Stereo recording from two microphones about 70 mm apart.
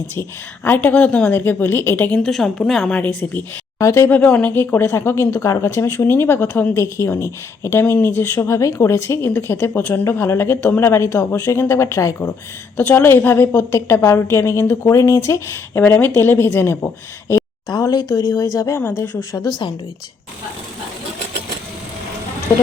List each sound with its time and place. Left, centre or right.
0.1 s speech: left
0.9 s speech: centre
1.3 s a woman's voice: left
2.0 s a woman's voice: centre
2.9 s speech: centre
3.8 s speech: left
4.0 s a woman's voice: left
6.8 s a woman's voice: left
12.7 s a woman's voice: left
17.7 s speech: left
18.9 s a woman's voice: left